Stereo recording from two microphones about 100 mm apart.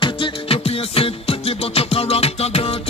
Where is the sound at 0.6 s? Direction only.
75° left (ahead or behind).